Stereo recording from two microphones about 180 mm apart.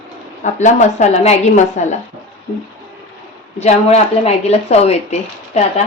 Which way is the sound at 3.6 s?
40° left (ahead or behind).